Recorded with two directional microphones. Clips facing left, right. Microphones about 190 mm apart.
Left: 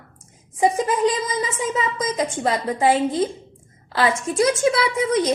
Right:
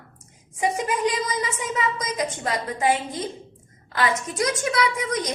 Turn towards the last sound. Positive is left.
turn(degrees=25)  # may be behind; listen again after turning